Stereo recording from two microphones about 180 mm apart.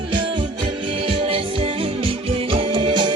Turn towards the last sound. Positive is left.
turn(degrees=-25)  # may be behind; listen again after turning